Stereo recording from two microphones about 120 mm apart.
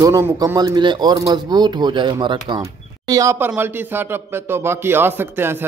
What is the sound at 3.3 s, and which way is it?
A man's voice, 15° right (ahead or behind).